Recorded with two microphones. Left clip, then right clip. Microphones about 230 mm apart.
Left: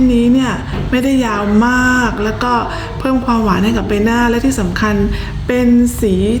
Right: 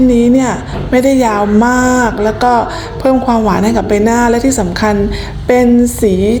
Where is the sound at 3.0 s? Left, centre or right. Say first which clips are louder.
Right 5 dB; left.